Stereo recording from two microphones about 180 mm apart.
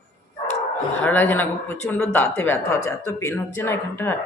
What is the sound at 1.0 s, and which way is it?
Speech, 10° left (ahead or behind).